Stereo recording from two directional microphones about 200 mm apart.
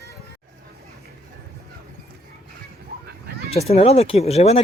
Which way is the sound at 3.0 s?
55° right (ahead or behind).